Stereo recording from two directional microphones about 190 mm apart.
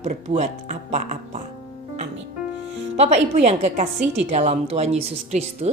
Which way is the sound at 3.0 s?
35° right (ahead or behind).